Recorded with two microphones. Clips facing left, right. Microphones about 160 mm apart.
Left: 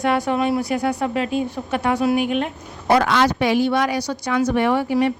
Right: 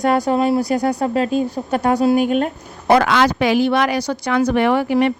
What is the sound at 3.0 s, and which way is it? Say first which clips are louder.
Speech: right 2 dB; 90° right.